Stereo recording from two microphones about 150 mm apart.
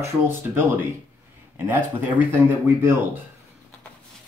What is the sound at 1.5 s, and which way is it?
Speech, 10° right (ahead or behind).